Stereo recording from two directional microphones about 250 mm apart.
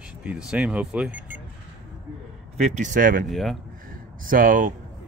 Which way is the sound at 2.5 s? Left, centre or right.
Right.